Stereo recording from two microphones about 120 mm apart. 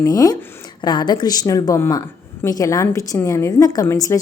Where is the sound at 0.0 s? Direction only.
30° left (ahead or behind).